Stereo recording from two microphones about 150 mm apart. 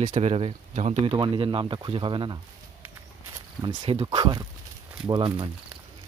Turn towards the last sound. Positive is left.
turn(degrees=-30)  # may be behind; listen again after turning